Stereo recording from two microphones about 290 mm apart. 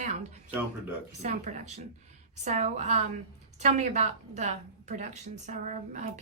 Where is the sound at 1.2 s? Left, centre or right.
Right.